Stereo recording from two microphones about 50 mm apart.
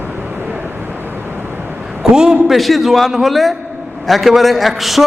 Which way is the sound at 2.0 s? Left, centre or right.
Centre.